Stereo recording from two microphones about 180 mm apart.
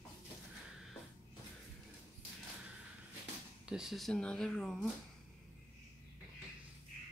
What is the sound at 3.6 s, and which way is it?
Speech, 5° right (ahead or behind).